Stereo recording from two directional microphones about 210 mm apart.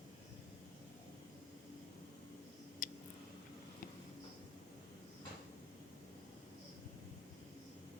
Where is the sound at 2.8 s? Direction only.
40° left (ahead or behind).